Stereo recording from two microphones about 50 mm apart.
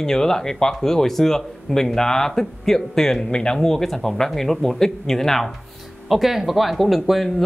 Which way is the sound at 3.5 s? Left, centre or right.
Centre.